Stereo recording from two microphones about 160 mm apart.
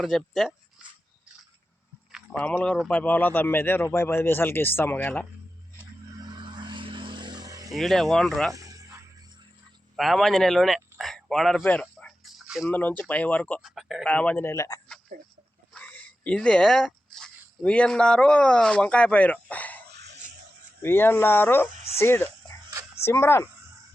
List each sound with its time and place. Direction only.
0.0 s speech: 5° left (ahead or behind)
2.3 s a man's voice: 10° left (ahead or behind)
6.2 s vehicle: 30° right (ahead or behind)
7.7 s speech: centre (ahead or behind)
8.5 s music: 20° right (ahead or behind)
9.9 s speech: centre (ahead or behind)
10.9 s a sound: centre (ahead or behind)
12.6 s a man's voice: 10° left (ahead or behind)
13.6 s a man's voice: centre (ahead or behind)
19.9 s a sound: 90° right
20.8 s a man's voice: 15° left (ahead or behind)